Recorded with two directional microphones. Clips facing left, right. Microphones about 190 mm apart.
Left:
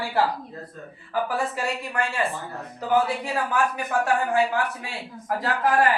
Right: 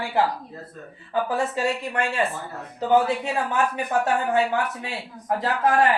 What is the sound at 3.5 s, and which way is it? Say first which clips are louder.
Speech: right 1 dB; 25° right (ahead or behind).